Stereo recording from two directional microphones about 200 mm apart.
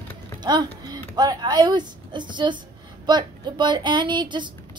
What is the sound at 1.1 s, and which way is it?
Speech, 20° right (ahead or behind).